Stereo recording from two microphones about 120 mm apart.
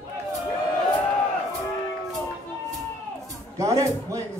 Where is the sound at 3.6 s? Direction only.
25° right (ahead or behind).